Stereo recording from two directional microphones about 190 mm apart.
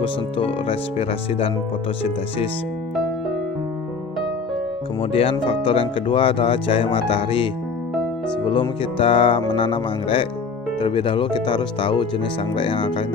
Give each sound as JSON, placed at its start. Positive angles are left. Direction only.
{"t": 0.0, "sound": "speech", "side_deg": 30}
{"t": 5.1, "sound": "speech", "side_deg": 30}
{"t": 8.5, "sound": "speech", "side_deg": 30}